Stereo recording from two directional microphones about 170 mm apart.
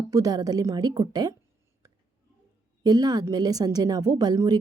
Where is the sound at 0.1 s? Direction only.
20° right (ahead or behind).